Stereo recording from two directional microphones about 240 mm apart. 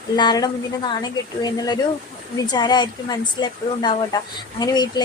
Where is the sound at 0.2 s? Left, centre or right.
Centre.